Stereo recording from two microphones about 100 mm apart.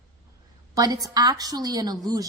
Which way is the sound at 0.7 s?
40° right (ahead or behind).